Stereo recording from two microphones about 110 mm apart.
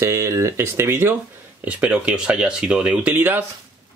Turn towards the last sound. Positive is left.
turn(degrees=-20)  # may be behind; listen again after turning